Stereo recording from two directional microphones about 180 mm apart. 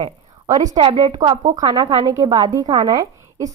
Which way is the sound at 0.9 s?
35° right (ahead or behind).